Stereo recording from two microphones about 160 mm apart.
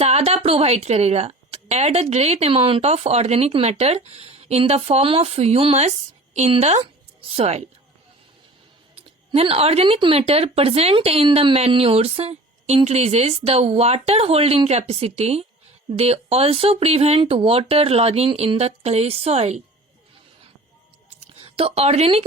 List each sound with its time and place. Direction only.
0.0 s a woman's voice: 40° right (ahead or behind)
9.0 s speech: 40° right (ahead or behind)
21.2 s a sound: 35° right (ahead or behind)